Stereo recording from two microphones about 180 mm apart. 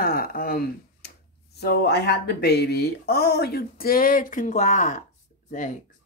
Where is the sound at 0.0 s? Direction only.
55° left (ahead or behind).